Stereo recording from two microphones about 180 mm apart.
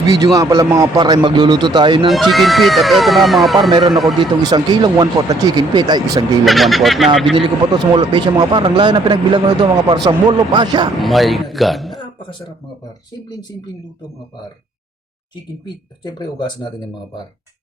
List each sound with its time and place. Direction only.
0.2 s speech: 20° right (ahead or behind)
2.0 s speech: centre (ahead or behind)
3.7 s speech: 25° right (ahead or behind)
6.4 s speech: centre (ahead or behind)
7.9 s speech: 25° right (ahead or behind)
11.0 s speech: centre (ahead or behind)
15.6 s speech: 25° left (ahead or behind)